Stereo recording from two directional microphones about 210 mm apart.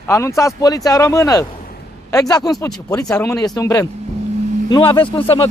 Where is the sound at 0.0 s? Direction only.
15° left (ahead or behind).